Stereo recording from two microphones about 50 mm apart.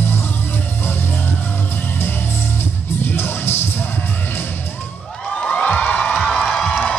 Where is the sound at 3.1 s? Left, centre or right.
Left.